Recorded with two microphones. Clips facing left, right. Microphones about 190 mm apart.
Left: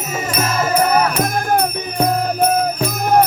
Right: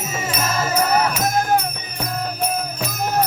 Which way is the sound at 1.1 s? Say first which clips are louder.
Left 2 dB; 60° left (ahead or behind).